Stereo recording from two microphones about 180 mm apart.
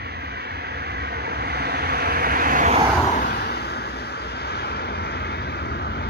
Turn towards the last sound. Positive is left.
turn(degrees=65)  # may be behind; listen again after turning